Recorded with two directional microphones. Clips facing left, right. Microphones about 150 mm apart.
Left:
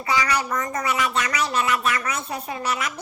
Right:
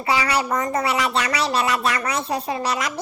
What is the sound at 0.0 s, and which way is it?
Speech, 30° right (ahead or behind).